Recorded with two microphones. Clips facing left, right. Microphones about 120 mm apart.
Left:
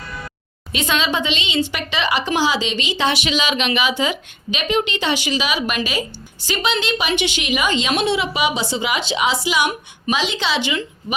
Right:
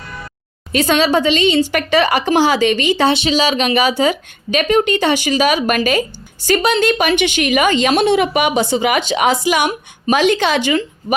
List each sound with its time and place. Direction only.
0.7 s a woman's voice: 45° right (ahead or behind)
3.1 s a woman's voice: 30° right (ahead or behind)